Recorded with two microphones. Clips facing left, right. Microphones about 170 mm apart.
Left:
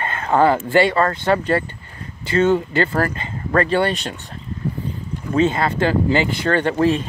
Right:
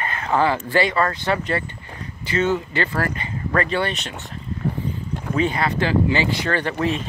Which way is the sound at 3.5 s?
35° left (ahead or behind).